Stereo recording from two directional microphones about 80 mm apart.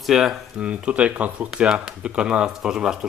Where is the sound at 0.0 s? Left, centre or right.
Centre.